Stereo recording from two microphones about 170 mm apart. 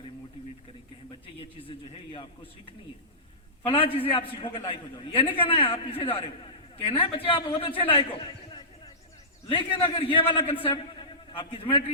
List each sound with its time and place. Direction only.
1.4 s a man's voice: 30° left (ahead or behind)
3.7 s a man's voice: 35° left (ahead or behind)